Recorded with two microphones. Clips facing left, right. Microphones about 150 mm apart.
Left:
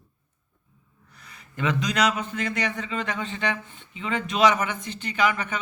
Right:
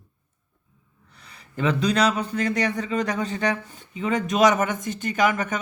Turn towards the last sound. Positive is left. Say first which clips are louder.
# right 3 dB
turn(degrees=-45)  # may be behind; listen again after turning